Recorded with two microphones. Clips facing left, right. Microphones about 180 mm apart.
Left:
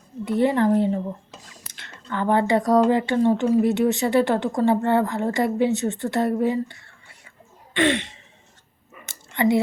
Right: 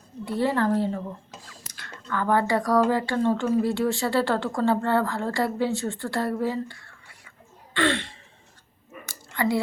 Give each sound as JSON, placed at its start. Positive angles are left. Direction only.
{"t": 0.3, "sound": "speech", "side_deg": 20}
{"t": 7.7, "sound": "throat clearing", "side_deg": 20}
{"t": 9.0, "sound": "whispering", "side_deg": 20}